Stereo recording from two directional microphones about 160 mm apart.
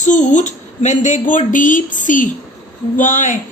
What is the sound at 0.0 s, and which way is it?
Speech, 50° left (ahead or behind).